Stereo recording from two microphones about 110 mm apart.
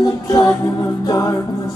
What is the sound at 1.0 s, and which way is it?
A capella, 30° left (ahead or behind).